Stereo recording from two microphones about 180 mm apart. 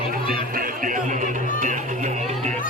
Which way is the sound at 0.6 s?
45° right (ahead or behind).